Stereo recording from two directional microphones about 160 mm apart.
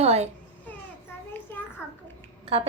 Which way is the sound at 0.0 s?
40° right (ahead or behind).